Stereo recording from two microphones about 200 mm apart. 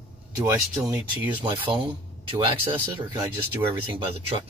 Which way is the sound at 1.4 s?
25° right (ahead or behind).